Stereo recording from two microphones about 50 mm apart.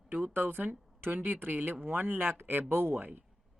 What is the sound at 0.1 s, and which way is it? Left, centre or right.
Speech, right.